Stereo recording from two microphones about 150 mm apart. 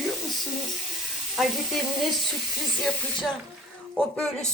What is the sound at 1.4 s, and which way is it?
Speech, centre (ahead or behind).